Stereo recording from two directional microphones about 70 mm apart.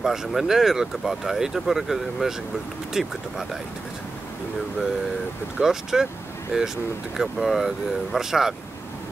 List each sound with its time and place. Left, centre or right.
0.0 s speech: centre
5.6 s speech: centre